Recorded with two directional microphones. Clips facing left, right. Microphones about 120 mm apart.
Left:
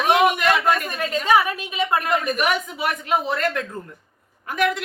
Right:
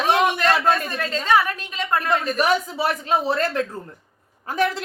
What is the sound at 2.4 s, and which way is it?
A woman's voice, 30° right (ahead or behind).